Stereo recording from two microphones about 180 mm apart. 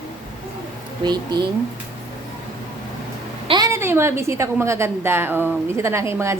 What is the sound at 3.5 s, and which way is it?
A woman's voice, 20° right (ahead or behind).